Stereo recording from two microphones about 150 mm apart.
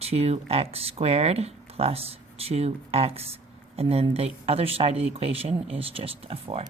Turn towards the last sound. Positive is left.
turn(degrees=-40)  # may be behind; listen again after turning